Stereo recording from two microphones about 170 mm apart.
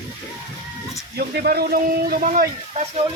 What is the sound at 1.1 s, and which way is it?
Speech, 70° right (ahead or behind).